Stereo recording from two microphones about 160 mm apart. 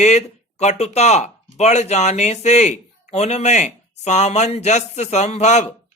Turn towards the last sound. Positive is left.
turn(degrees=45)  # may be behind; listen again after turning